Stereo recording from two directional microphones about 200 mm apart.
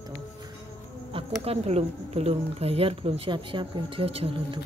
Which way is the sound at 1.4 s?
30° right (ahead or behind).